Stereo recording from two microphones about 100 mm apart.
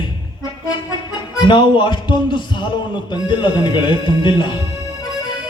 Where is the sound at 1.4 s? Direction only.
50° left (ahead or behind).